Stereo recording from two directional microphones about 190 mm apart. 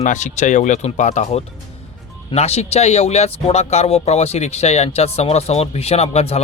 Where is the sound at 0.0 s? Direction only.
40° left (ahead or behind).